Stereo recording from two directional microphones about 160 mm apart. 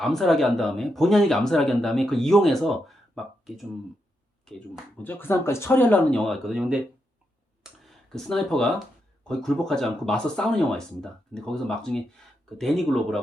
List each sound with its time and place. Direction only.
0.0 s speech: centre (ahead or behind)
7.6 s clicking: centre (ahead or behind)
9.2 s speech: 5° left (ahead or behind)